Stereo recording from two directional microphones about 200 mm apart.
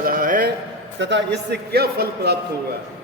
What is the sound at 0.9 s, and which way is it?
A man's voice, 60° right (ahead or behind).